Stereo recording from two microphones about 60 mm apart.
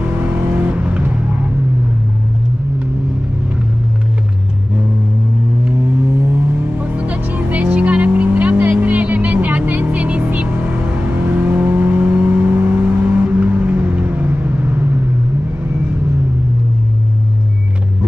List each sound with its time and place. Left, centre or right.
0.0 s vehicle: right
7.0 s vehicle: right